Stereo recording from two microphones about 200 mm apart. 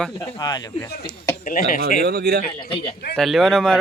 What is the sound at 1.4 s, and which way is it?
Speech, 45° left (ahead or behind).